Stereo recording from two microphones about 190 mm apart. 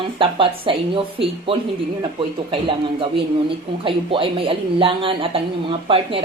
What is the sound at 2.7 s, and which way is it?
Speech, 25° right (ahead or behind).